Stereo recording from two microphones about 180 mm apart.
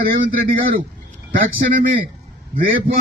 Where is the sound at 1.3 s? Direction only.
50° right (ahead or behind).